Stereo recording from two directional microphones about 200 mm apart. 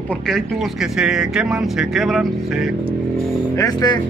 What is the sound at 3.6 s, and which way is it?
Speech, 20° left (ahead or behind).